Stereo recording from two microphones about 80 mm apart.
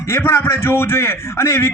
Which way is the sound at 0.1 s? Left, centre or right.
Left.